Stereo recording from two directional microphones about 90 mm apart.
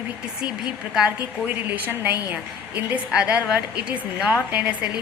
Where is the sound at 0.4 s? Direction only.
5° right (ahead or behind).